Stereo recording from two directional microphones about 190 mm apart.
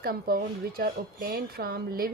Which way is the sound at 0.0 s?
50° right (ahead or behind).